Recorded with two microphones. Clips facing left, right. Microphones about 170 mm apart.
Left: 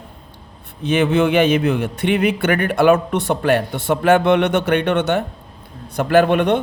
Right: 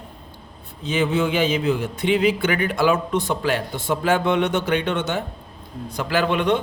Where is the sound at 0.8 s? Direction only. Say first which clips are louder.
Left 5 dB; 65° left (ahead or behind).